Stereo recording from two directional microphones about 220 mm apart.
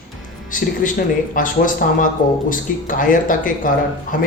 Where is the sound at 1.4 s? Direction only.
40° left (ahead or behind).